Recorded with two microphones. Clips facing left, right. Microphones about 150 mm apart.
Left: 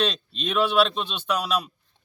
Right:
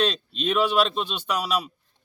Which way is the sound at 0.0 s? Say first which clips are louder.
Right 2 dB; 5° right (ahead or behind).